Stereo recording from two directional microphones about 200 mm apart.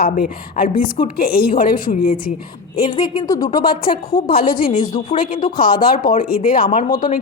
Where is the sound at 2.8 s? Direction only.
20° left (ahead or behind).